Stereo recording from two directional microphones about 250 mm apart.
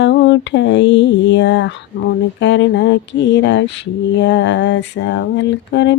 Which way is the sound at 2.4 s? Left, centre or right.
Left.